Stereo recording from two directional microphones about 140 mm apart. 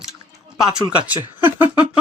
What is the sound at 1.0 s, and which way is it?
Speech, 15° right (ahead or behind).